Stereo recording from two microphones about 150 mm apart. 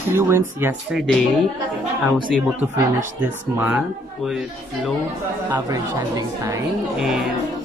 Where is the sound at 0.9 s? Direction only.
Centre (ahead or behind).